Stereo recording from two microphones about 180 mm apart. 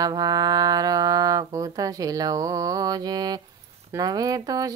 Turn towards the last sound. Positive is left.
turn(degrees=-20)  # may be behind; listen again after turning